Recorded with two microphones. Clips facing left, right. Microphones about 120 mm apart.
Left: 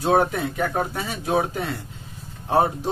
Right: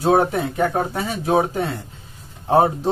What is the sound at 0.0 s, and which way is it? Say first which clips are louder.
Speech: right 3 dB; 25° right (ahead or behind).